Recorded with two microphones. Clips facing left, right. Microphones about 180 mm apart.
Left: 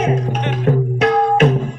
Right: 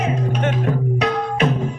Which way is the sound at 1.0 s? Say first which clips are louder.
Left 9 dB; 50° left (ahead or behind).